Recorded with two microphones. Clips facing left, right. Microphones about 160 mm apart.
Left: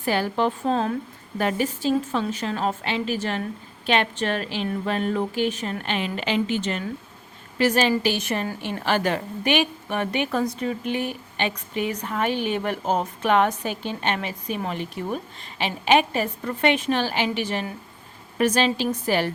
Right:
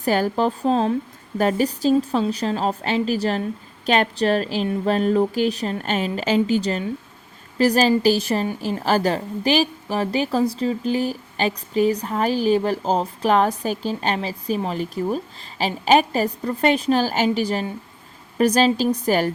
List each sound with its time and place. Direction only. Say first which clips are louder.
0.0 s a woman's voice: right 3 dB; 40° right (ahead or behind)